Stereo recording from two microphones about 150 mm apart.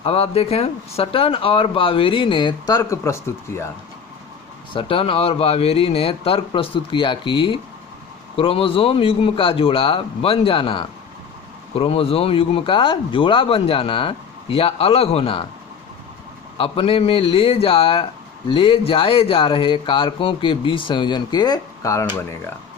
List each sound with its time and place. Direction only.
0.0 s speech: 40° left (ahead or behind); by 3.7 s 20° left (ahead or behind)
4.7 s speech: 35° left (ahead or behind)
16.6 s speech: 40° left (ahead or behind); by 22.4 s 20° left (ahead or behind)